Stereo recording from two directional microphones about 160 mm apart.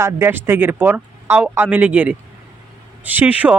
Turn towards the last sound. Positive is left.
turn(degrees=-10)  # may be behind; listen again after turning